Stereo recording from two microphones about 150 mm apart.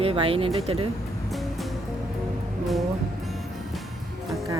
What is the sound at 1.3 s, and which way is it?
Music, centre (ahead or behind).